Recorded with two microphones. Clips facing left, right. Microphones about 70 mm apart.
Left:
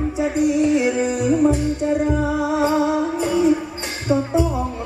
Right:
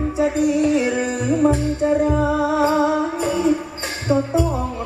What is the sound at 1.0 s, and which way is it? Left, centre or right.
Music, right.